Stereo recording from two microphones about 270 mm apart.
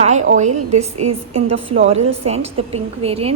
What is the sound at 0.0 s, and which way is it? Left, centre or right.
A woman's voice, right.